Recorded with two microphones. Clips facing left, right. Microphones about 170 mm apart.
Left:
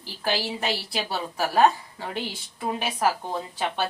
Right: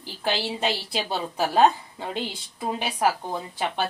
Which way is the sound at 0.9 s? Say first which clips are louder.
Right 1 dB; 20° right (ahead or behind).